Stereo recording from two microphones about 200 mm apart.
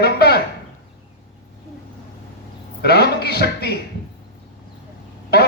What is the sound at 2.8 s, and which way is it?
Speech, 55° left (ahead or behind).